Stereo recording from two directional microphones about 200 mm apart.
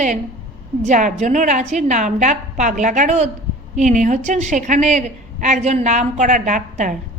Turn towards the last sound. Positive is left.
turn(degrees=-40)  # may be behind; listen again after turning